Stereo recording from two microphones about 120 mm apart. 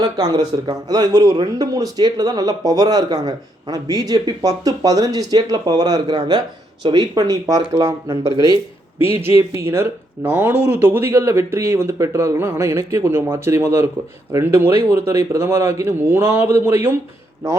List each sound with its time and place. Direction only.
0.0 s speech: 35° right (ahead or behind); by 17.0 s 20° right (ahead or behind)